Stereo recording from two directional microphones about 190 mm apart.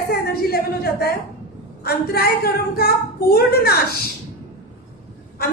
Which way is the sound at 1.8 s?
55° left (ahead or behind).